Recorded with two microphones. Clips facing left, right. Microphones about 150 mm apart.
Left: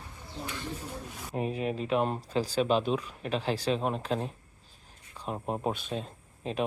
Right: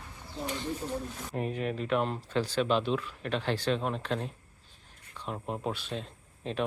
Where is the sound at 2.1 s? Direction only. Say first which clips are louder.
Left 1 dB; 35° left (ahead or behind).